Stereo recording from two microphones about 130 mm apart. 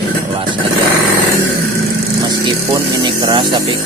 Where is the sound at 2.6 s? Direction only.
30° right (ahead or behind).